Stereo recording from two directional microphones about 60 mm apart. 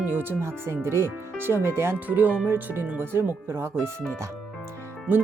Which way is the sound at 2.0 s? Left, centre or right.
Right.